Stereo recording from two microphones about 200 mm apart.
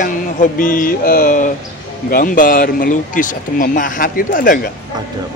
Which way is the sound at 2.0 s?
45° left (ahead or behind).